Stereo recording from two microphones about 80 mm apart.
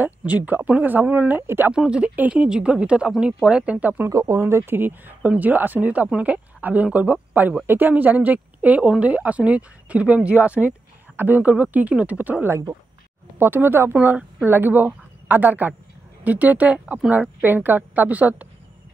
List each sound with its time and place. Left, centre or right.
0.0 s speech: right
1.7 s speech: centre
4.1 s speech: right; by 18.5 s centre